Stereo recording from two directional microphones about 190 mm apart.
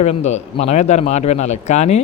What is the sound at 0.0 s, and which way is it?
A man's voice, 35° left (ahead or behind).